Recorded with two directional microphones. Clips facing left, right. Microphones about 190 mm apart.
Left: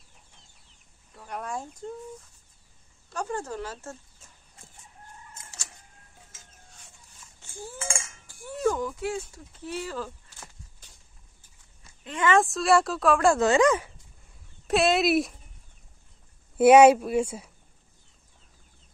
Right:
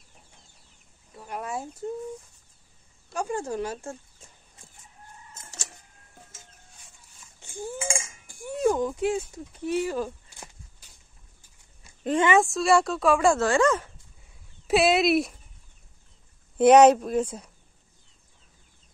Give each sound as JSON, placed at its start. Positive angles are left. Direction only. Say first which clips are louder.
{"t": 1.1, "sound": "chicken", "louder": "right 1 dB", "side_deg": -5}
{"t": 3.1, "sound": "a sound", "louder": "right 3 dB", "side_deg": -10}
{"t": 7.6, "sound": "a sound", "louder": "right 5 dB", "side_deg": -15}
{"t": 12.4, "sound": "a woman's voice", "louder": "right 1 dB", "side_deg": 0}
{"t": 13.4, "sound": "speech", "louder": "left 1 dB", "side_deg": 15}
{"t": 14.7, "sound": "a woman's voice", "louder": "right 2 dB", "side_deg": 0}
{"t": 16.5, "sound": "speech", "louder": "even", "side_deg": 5}